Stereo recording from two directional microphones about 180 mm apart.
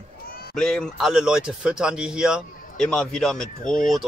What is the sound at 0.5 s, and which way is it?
Speech, 5° left (ahead or behind).